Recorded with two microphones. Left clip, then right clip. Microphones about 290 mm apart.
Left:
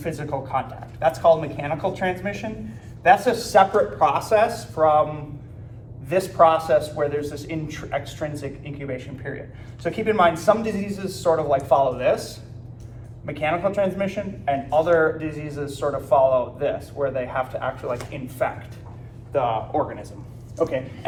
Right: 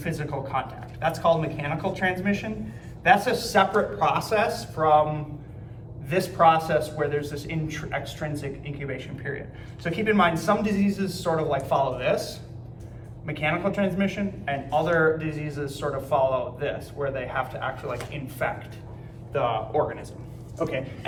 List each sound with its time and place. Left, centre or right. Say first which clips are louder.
0.0 s a man's voice: left 3 dB; centre
6.1 s a man's voice: left 3 dB; centre